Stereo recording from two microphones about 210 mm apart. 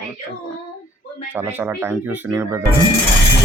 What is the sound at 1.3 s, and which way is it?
Speech, 10° right (ahead or behind).